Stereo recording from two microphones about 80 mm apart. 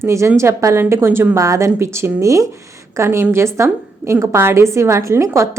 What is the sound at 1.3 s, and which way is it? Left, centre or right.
A woman's voice, right.